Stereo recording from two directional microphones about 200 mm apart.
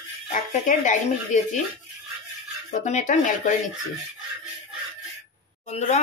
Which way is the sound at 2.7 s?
35° left (ahead or behind).